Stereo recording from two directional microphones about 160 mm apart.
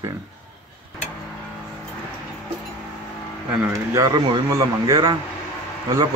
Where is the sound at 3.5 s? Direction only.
15° right (ahead or behind).